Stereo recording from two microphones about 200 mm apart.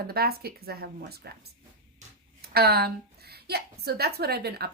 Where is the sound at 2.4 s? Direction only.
50° right (ahead or behind).